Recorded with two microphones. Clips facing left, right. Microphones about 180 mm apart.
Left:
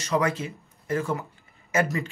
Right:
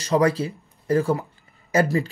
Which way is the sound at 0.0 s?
35° right (ahead or behind).